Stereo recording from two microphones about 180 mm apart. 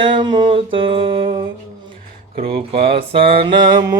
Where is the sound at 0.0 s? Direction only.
25° right (ahead or behind).